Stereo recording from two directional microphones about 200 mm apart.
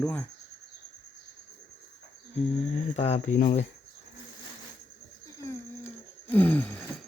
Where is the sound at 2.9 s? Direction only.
30° left (ahead or behind).